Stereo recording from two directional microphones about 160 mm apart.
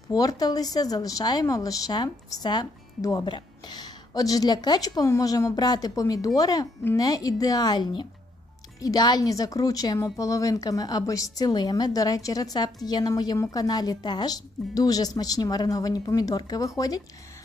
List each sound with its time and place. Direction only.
0.1 s speech: 25° left (ahead or behind)